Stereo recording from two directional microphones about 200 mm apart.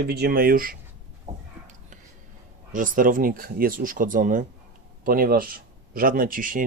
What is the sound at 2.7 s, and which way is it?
Speech, 40° right (ahead or behind).